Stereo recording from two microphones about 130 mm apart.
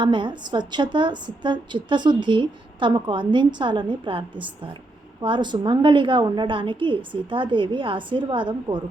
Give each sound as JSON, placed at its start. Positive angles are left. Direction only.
{"t": 0.0, "sound": "a woman's voice", "side_deg": -40}